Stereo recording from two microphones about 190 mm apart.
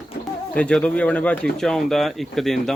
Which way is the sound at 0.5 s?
5° left (ahead or behind).